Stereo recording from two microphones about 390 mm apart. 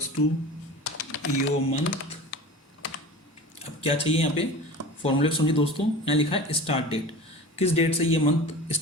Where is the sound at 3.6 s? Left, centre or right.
Centre.